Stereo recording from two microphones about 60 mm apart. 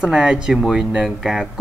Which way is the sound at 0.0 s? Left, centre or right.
Centre.